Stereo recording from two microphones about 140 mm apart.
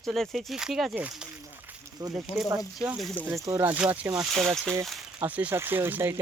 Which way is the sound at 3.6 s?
10° right (ahead or behind).